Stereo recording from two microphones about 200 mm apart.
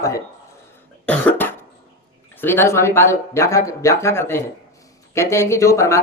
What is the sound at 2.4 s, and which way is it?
Speech, 10° left (ahead or behind).